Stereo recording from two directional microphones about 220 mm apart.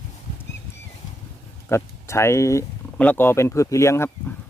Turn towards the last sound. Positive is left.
turn(degrees=10)  # may be behind; listen again after turning